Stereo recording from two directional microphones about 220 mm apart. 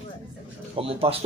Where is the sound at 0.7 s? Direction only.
25° right (ahead or behind).